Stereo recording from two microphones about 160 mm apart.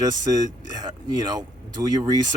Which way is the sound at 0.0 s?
25° right (ahead or behind).